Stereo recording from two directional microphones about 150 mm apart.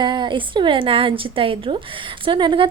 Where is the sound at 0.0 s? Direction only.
30° right (ahead or behind).